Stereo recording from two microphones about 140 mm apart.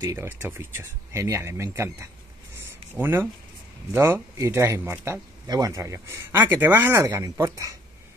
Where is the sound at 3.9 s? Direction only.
20° right (ahead or behind).